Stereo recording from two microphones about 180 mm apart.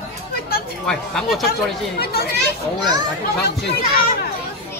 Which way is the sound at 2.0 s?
60° left (ahead or behind).